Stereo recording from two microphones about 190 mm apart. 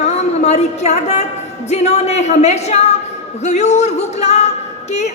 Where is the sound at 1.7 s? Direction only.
35° left (ahead or behind).